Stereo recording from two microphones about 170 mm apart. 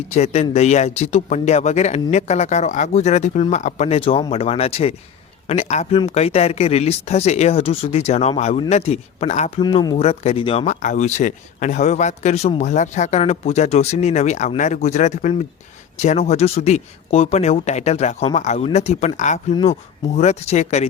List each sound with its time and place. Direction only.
0.1 s speech: 40° left (ahead or behind)
9.6 s speech: 25° left (ahead or behind)
10.0 s speech: 35° left (ahead or behind)
10.8 s a man's voice: 45° left (ahead or behind)